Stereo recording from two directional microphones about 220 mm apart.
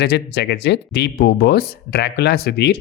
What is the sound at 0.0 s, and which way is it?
Speech, 50° left (ahead or behind).